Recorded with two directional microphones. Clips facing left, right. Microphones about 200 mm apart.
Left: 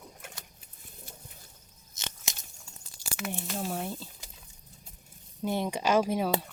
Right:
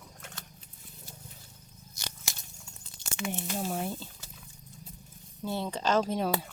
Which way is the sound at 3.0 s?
5° left (ahead or behind).